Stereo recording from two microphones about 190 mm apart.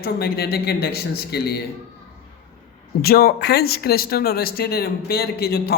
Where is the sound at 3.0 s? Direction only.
55° left (ahead or behind).